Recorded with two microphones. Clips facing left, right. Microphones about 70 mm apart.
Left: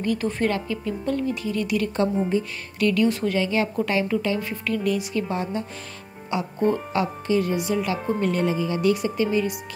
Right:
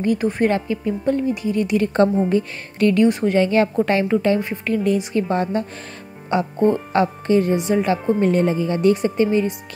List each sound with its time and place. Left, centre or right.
0.0 s speech: right
3.3 s a woman's voice: right
4.4 s speech: right
5.3 s a woman's voice: right
6.3 s speech: right